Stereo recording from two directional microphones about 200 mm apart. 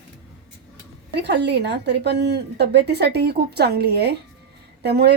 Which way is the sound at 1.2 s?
60° right (ahead or behind).